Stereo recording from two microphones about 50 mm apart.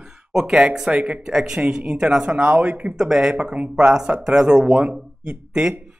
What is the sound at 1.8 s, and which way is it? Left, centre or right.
Speech, right.